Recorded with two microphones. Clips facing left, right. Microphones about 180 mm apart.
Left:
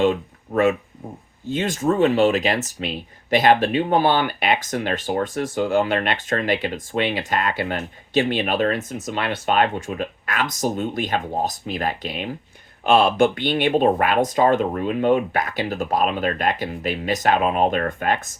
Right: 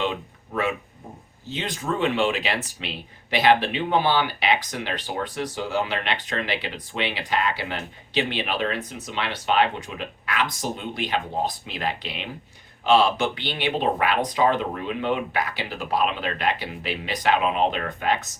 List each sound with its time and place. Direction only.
0.0 s speech: 45° left (ahead or behind)